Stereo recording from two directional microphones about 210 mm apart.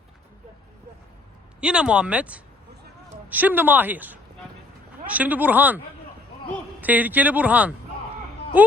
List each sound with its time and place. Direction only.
1.6 s speech: 5° right (ahead or behind)
6.8 s speech: 10° right (ahead or behind)